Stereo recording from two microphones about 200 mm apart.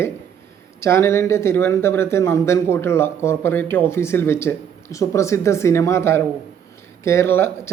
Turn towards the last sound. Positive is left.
turn(degrees=10)  # may be behind; listen again after turning